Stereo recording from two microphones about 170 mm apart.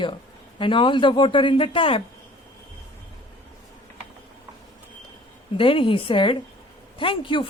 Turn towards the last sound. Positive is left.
turn(degrees=30)  # may be behind; listen again after turning